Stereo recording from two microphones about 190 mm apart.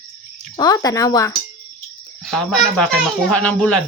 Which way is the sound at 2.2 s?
Centre (ahead or behind).